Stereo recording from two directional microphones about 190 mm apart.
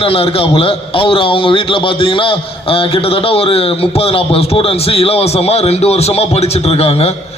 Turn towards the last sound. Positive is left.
turn(degrees=30)  # may be behind; listen again after turning